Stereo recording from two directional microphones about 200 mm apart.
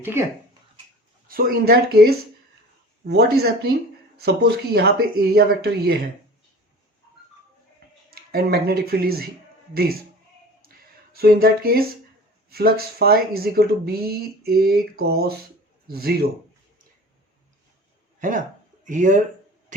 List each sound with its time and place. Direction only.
0.0 s speech: 10° right (ahead or behind)
1.3 s speech: 45° right (ahead or behind)
8.1 s speech: 50° right (ahead or behind)
11.1 s speech: 50° right (ahead or behind)
18.2 s speech: 40° right (ahead or behind)